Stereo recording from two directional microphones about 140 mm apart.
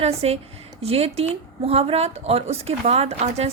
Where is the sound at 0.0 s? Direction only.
45° right (ahead or behind).